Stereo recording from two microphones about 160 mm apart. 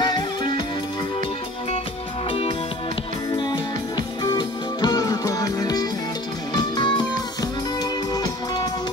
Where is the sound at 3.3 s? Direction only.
25° left (ahead or behind).